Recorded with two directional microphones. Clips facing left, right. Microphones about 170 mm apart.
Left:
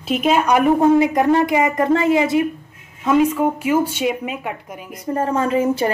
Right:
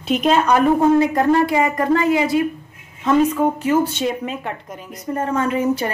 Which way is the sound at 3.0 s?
10° left (ahead or behind).